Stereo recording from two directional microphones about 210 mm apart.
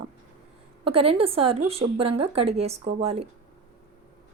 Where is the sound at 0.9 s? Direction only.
25° right (ahead or behind).